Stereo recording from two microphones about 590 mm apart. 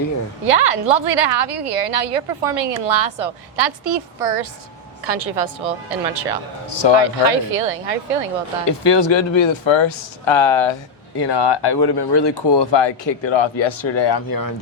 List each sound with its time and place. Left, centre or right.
0.4 s a woman's voice: right
6.8 s speech: left
7.3 s a woman's voice: right
8.9 s speech: left